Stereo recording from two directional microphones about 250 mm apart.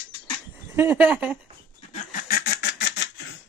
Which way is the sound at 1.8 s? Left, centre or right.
Left.